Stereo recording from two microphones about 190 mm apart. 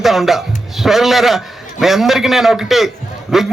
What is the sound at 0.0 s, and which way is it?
A man's voice, centre (ahead or behind).